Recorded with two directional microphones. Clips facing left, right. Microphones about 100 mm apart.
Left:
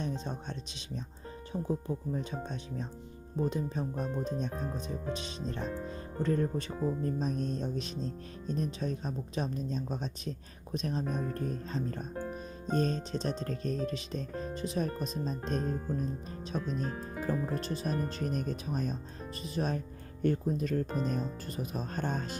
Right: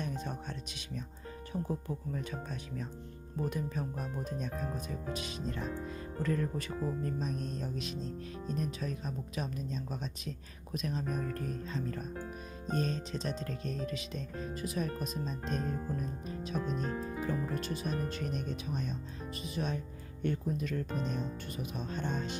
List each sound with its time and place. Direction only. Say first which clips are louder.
0.0 s speech: left 2 dB; 25° left (ahead or behind)
17.2 s speech: left 5 dB; 35° left (ahead or behind)